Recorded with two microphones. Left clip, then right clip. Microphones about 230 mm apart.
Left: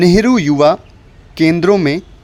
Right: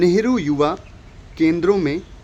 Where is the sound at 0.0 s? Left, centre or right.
Left.